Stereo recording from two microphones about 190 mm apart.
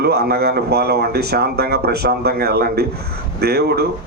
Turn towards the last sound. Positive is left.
turn(degrees=-55)  # may be behind; listen again after turning